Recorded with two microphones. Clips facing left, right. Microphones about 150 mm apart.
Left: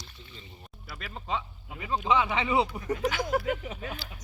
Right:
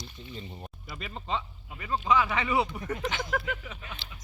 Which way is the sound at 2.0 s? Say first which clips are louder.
Even; 20° left (ahead or behind).